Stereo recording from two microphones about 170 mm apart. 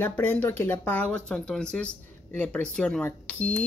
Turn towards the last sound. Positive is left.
turn(degrees=10)  # may be behind; listen again after turning